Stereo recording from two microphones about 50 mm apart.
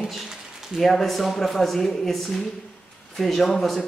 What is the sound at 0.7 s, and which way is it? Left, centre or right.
Speech, centre.